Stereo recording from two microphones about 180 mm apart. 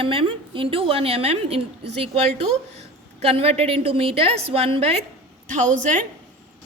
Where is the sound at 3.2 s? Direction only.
35° right (ahead or behind).